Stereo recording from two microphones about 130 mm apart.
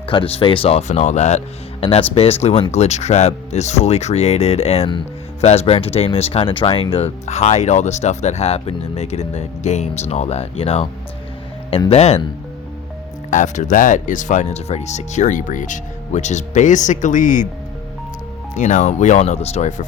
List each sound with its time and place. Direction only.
0.0 s speech: 45° left (ahead or behind); by 1.4 s 60° left (ahead or behind)
1.8 s speech: 45° left (ahead or behind)
11.9 s speech: 50° left (ahead or behind)
13.3 s speech: 75° left (ahead or behind)
18.5 s speech: 70° left (ahead or behind)